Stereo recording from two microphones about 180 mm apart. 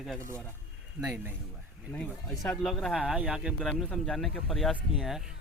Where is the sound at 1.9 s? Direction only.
5° left (ahead or behind).